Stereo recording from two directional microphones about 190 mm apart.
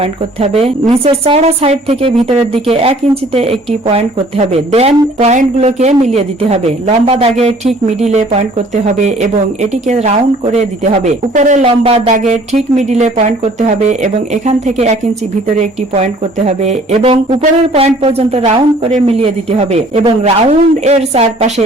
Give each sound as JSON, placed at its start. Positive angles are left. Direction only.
{"t": 0.0, "sound": "speech", "side_deg": -30}
{"t": 16.5, "sound": "speech", "side_deg": -35}